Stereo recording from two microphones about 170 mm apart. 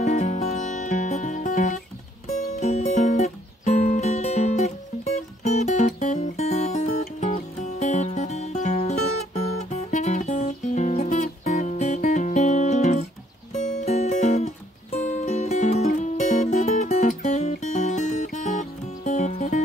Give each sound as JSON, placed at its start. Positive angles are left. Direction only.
{"t": 0.0, "sound": "music", "side_deg": 45}